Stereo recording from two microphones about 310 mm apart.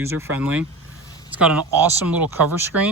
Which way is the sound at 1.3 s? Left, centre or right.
Centre.